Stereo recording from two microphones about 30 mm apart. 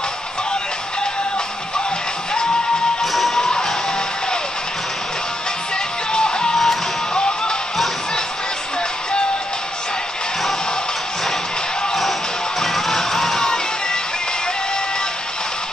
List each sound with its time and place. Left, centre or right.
3.0 s music: centre
3.3 s music: left
6.1 s music: left
6.5 s music: centre
7.2 s music: left
11.9 s music: centre